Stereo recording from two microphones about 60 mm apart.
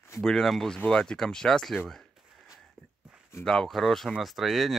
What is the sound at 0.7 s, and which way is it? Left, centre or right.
Speech, centre.